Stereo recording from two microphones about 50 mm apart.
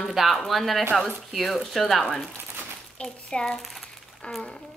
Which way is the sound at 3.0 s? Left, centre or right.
Centre.